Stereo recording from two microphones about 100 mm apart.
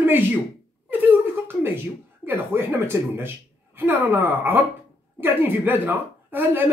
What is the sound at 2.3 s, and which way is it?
Speech, 20° right (ahead or behind).